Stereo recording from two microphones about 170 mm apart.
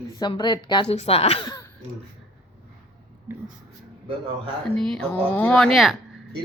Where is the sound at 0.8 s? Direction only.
40° left (ahead or behind).